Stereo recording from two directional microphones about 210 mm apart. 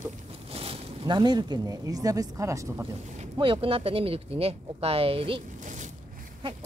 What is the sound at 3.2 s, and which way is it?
Speech, 25° right (ahead or behind).